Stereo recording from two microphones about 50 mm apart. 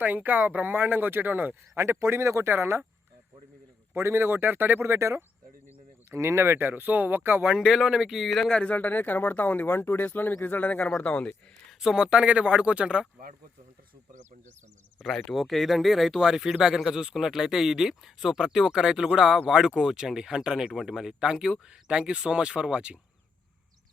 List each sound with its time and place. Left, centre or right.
0.0 s speech: right
1.7 s speech: right
2.5 s speech: right
3.9 s speech: right
4.8 s speech: right
7.5 s speech: centre
8.4 s speech: centre
8.7 s speech: left
11.7 s a sound: centre
11.9 s speech: right
15.2 s speech: centre